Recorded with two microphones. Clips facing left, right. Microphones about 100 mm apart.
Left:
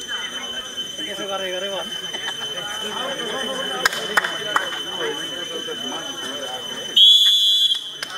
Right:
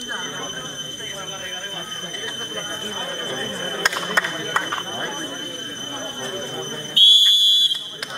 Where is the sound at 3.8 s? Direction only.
5° left (ahead or behind).